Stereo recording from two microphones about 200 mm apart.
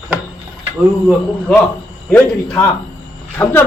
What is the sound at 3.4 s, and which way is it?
Speech, 10° left (ahead or behind).